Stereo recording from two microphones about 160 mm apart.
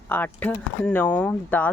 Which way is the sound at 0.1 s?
10° left (ahead or behind).